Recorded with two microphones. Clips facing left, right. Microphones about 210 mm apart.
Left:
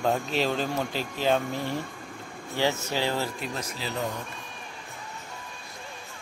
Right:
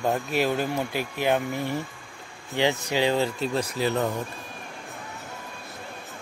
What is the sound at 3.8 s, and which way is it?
Speech, 55° right (ahead or behind).